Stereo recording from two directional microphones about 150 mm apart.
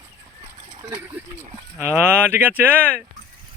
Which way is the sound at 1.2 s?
10° right (ahead or behind).